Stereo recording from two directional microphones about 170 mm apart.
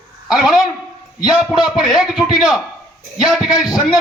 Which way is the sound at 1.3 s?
Centre (ahead or behind).